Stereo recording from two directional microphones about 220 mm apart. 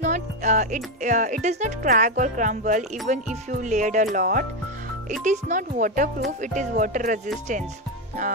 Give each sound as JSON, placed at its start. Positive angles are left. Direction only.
{"t": 0.0, "sound": "music", "side_deg": -35}
{"t": 1.0, "sound": "speech", "side_deg": -35}